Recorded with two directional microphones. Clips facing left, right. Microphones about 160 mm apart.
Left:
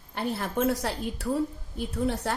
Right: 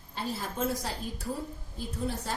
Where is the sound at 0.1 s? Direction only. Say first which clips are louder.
Left 5 dB; 60° left (ahead or behind).